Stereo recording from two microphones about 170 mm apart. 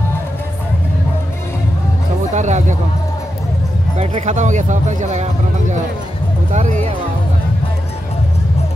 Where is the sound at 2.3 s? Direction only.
45° right (ahead or behind).